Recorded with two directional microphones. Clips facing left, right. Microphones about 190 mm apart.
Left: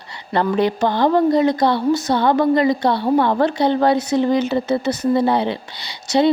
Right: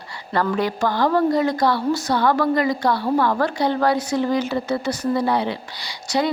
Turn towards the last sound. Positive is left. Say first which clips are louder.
# left 5 dB
turn(degrees=25)  # may be behind; listen again after turning